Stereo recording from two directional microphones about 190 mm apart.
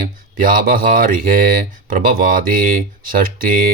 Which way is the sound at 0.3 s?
45° right (ahead or behind).